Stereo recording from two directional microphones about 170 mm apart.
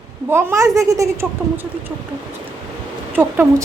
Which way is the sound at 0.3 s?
15° right (ahead or behind).